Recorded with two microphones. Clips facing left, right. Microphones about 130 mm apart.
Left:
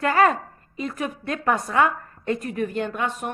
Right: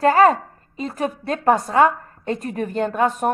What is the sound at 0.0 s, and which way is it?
A woman's voice, 30° right (ahead or behind).